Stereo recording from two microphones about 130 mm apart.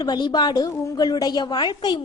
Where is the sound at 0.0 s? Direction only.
35° left (ahead or behind).